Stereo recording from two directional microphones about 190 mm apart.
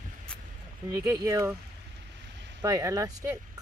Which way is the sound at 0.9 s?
15° right (ahead or behind).